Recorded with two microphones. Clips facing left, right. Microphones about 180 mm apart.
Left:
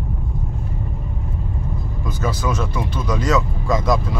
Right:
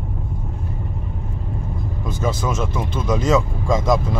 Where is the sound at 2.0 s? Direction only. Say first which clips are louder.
Even; 25° right (ahead or behind).